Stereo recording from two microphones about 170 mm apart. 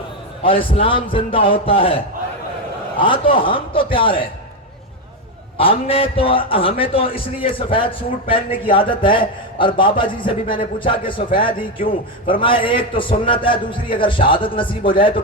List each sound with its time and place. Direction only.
0.4 s a man's voice: 30° left (ahead or behind)
3.0 s a man's voice: 30° left (ahead or behind)
5.5 s a man's voice: 35° left (ahead or behind)